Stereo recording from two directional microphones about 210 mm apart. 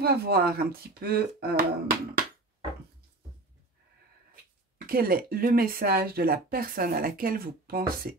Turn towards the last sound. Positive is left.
turn(degrees=-45)  # may be behind; listen again after turning